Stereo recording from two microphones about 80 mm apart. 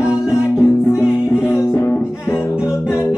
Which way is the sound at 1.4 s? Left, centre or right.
Left.